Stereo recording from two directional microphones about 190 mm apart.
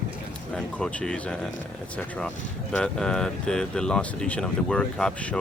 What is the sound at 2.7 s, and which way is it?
Speech, 5° left (ahead or behind).